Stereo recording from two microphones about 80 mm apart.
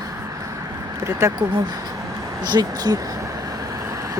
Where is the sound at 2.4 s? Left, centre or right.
Right.